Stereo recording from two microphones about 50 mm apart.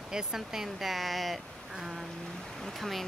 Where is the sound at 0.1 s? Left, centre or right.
Centre.